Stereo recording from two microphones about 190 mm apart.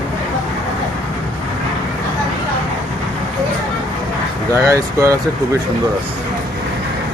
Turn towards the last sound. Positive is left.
turn(degrees=-15)  # may be behind; listen again after turning